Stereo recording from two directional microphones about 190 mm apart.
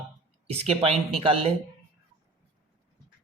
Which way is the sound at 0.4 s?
30° right (ahead or behind).